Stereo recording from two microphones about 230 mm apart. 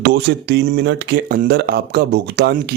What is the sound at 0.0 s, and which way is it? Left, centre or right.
Speech, right.